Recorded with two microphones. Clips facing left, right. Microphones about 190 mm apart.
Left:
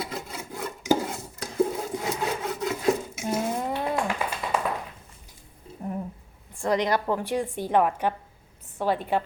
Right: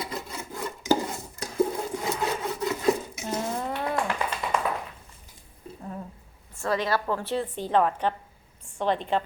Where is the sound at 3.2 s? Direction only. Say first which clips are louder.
Left 3 dB; 10° left (ahead or behind).